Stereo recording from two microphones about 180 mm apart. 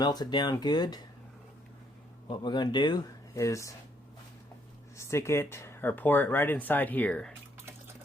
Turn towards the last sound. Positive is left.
turn(degrees=5)  # may be behind; listen again after turning